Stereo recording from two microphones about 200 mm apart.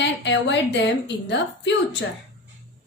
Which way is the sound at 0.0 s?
60° left (ahead or behind).